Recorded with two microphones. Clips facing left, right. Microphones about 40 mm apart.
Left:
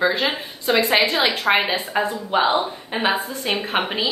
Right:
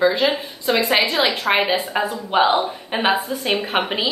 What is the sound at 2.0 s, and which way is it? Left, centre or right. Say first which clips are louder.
Speech: even; right.